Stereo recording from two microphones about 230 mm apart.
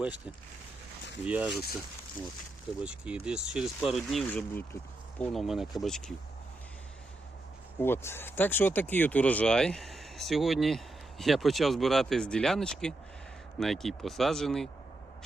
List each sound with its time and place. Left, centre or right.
1.2 s speech: centre
2.8 s speech: centre
7.8 s speech: centre